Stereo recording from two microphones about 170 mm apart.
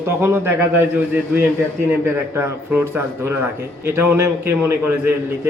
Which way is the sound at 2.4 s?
15° right (ahead or behind).